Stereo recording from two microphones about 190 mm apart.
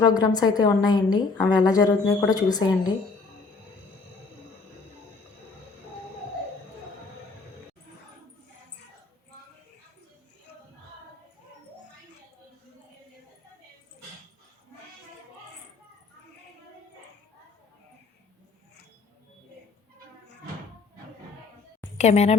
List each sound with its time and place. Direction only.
0.1 s a woman's voice: 20° left (ahead or behind)
21.9 s speech: 35° left (ahead or behind)